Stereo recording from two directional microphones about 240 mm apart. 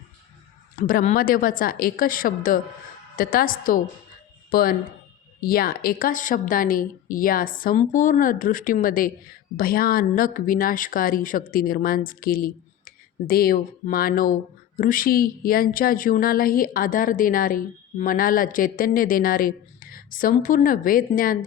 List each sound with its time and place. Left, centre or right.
0.8 s speech: left